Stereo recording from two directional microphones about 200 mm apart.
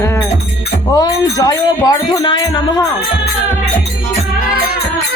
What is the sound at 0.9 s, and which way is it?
Music, 20° left (ahead or behind).